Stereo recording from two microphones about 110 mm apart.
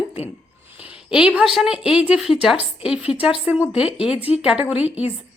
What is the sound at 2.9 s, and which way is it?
Speech, 65° left (ahead or behind).